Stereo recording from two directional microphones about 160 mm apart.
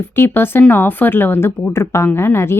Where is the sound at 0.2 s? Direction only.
15° left (ahead or behind).